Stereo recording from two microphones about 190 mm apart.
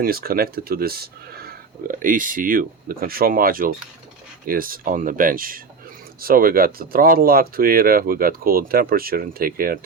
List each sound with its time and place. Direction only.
0.0 s speech: 50° right (ahead or behind)